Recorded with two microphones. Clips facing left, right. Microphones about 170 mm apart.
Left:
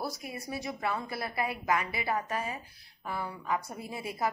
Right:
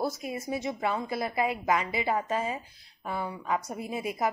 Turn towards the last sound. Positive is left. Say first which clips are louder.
# right 4 dB
turn(degrees=-20)  # may be behind; listen again after turning